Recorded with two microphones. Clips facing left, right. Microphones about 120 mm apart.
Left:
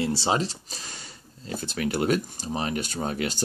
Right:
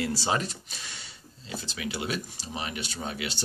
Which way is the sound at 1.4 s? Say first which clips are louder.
Left 6 dB; 50° left (ahead or behind).